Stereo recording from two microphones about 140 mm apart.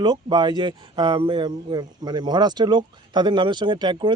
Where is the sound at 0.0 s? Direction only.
30° right (ahead or behind).